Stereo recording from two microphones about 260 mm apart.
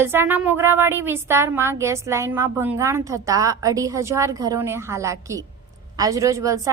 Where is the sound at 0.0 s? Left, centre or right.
Centre.